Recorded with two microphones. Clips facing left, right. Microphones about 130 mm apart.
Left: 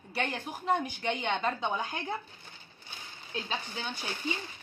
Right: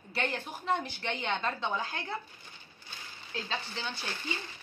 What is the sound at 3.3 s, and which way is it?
A woman's voice, 15° left (ahead or behind).